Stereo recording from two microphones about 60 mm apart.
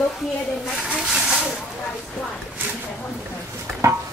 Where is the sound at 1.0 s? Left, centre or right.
Centre.